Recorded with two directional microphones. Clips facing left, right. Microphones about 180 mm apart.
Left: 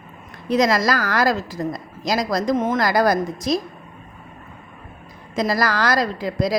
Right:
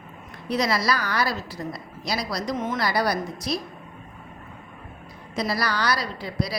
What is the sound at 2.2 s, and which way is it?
Speech, 50° left (ahead or behind).